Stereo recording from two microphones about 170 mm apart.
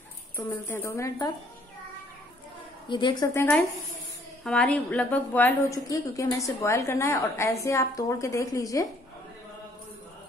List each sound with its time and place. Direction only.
0.7 s a woman's voice: 15° left (ahead or behind)
2.9 s speech: 30° left (ahead or behind)
3.3 s a woman's voice: 10° left (ahead or behind)